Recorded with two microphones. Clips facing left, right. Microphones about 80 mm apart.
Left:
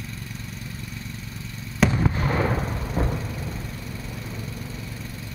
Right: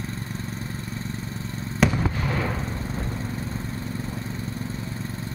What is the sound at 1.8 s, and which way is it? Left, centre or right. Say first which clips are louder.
Fireworks: even; centre.